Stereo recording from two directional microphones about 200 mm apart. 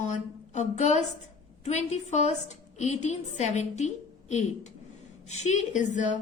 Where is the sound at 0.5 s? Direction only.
35° left (ahead or behind).